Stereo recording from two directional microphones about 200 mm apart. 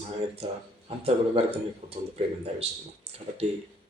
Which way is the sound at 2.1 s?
30° right (ahead or behind).